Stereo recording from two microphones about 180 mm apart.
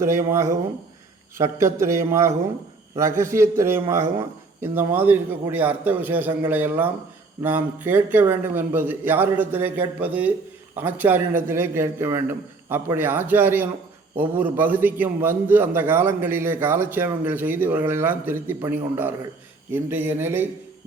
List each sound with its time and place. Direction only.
0.0 s a man's voice: 15° right (ahead or behind)